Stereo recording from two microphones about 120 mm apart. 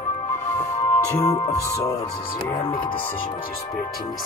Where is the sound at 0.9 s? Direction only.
25° left (ahead or behind).